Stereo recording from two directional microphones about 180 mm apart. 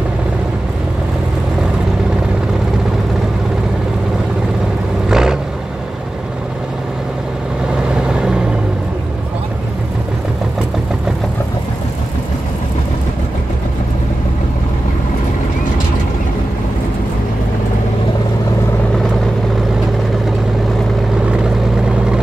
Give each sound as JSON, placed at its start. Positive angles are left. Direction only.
{"t": 5.1, "sound": "vehicle", "side_deg": -5}
{"t": 7.9, "sound": "vehicle", "side_deg": -5}